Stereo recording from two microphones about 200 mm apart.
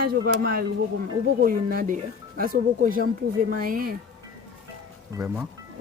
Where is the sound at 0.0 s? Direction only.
50° right (ahead or behind).